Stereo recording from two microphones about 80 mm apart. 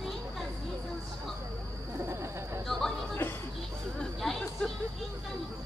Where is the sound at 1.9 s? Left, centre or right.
Right.